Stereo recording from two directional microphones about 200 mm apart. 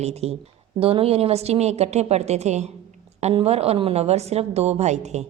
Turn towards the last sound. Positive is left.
turn(degrees=-35)  # may be behind; listen again after turning